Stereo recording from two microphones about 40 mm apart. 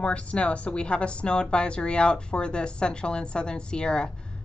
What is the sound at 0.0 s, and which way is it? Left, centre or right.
Speech, left.